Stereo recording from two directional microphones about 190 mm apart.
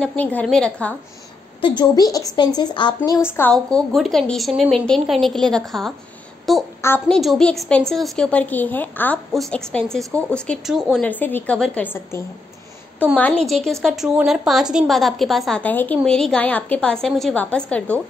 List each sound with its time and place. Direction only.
0.0 s a woman's voice: 10° left (ahead or behind)
1.6 s a woman's voice: 20° left (ahead or behind)
3.3 s a woman's voice: 10° left (ahead or behind)
3.7 s a woman's voice: centre (ahead or behind)
6.8 s a woman's voice: 10° left (ahead or behind)
7.2 s a woman's voice: centre (ahead or behind)